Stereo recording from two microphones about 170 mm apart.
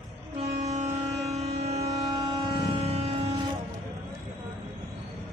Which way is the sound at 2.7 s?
35° right (ahead or behind).